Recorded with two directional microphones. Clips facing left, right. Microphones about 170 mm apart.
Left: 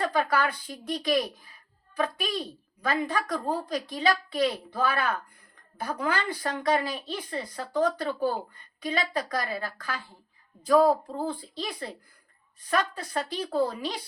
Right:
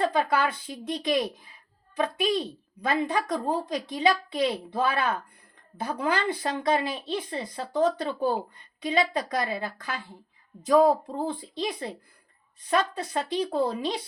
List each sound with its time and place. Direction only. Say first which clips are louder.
0.0 s a woman's voice: right 2 dB; 25° right (ahead or behind)